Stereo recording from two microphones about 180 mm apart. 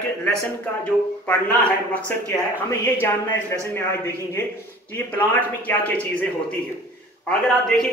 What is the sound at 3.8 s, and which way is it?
A man's voice, 15° left (ahead or behind).